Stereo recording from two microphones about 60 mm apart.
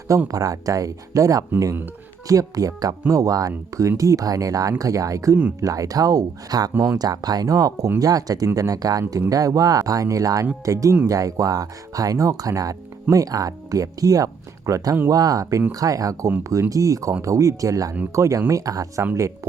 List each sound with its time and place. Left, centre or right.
0.3 s speech: right
8.5 s speech: right
15.1 s speech: right
15.7 s speech: right
18.1 s speech: right